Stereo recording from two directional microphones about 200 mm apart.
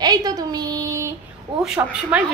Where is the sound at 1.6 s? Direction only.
5° right (ahead or behind).